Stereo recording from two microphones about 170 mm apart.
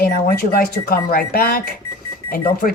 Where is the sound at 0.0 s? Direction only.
60° left (ahead or behind).